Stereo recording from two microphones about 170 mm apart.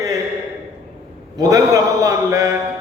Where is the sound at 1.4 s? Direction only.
20° right (ahead or behind).